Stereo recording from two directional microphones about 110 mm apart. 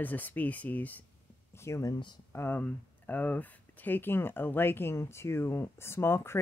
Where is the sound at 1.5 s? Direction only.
25° left (ahead or behind).